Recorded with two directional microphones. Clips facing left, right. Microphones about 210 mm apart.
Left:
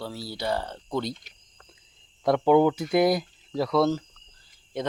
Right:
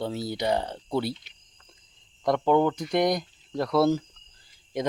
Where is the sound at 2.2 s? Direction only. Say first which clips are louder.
Left 3 dB; 5° left (ahead or behind).